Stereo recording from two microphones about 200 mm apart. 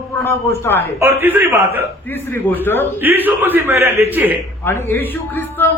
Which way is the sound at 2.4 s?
10° left (ahead or behind).